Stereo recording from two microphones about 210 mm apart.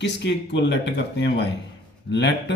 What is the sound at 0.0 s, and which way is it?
Speech, 55° left (ahead or behind).